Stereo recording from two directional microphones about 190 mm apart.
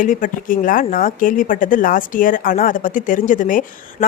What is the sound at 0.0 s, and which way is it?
Speech, 45° left (ahead or behind).